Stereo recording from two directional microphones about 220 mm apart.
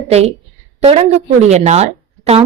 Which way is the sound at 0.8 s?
25° right (ahead or behind).